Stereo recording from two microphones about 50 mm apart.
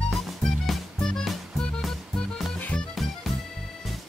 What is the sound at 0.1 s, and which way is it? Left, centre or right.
Music, centre.